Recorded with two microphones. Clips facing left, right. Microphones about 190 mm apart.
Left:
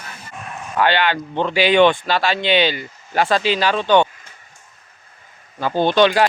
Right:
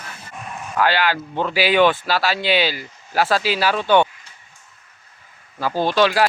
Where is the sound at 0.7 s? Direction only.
5° right (ahead or behind).